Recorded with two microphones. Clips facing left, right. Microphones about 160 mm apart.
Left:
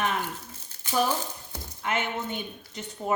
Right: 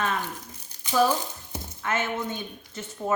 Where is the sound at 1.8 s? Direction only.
15° left (ahead or behind).